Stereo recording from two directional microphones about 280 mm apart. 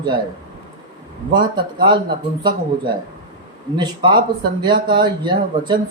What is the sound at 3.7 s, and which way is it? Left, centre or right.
Speech, centre.